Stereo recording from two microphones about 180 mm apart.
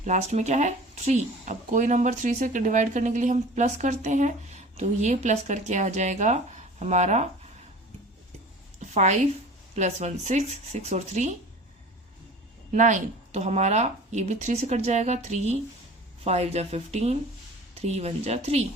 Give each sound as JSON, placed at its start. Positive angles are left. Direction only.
{"t": 0.0, "sound": "speech", "side_deg": -40}
{"t": 8.9, "sound": "a woman's voice", "side_deg": -40}
{"t": 12.7, "sound": "speech", "side_deg": -45}